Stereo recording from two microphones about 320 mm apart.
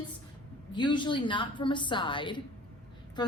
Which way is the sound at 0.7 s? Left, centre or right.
Centre.